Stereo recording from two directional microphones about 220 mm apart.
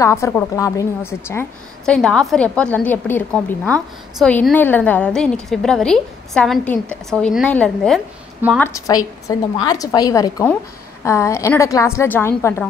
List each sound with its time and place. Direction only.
0.0 s a woman's voice: 15° left (ahead or behind)